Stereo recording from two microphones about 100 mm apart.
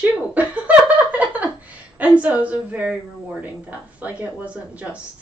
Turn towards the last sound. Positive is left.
turn(degrees=-10)  # may be behind; listen again after turning